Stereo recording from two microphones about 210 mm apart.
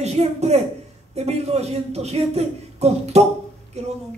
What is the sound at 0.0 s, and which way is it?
A woman's voice, 30° right (ahead or behind).